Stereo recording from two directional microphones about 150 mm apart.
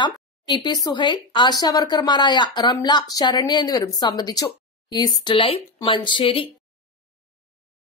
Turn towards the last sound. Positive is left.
turn(degrees=35)  # may be behind; listen again after turning